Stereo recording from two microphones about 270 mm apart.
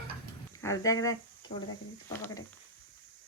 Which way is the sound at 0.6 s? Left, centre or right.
Centre.